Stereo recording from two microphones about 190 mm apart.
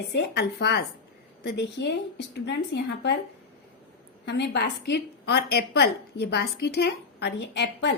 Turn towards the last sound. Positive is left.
turn(degrees=65)  # may be behind; listen again after turning